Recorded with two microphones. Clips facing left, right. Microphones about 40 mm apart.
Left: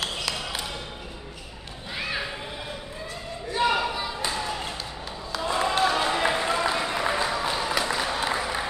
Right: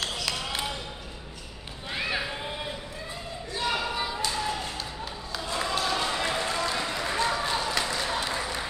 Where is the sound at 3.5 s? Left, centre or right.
Centre.